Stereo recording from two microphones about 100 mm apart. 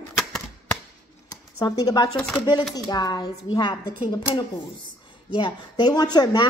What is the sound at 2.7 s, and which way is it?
Speech, 40° left (ahead or behind).